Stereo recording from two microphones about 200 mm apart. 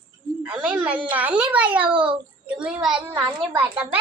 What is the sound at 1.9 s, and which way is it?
Speech, 25° right (ahead or behind).